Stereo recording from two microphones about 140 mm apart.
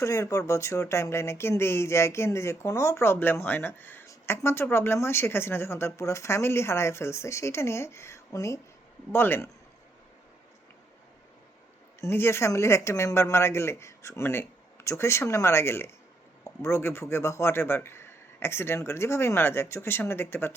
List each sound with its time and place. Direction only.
0.0 s a man's voice: 20° left (ahead or behind)
11.9 s a man's voice: 20° left (ahead or behind)